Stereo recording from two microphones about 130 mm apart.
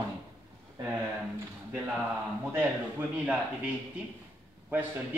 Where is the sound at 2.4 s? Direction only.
15° right (ahead or behind).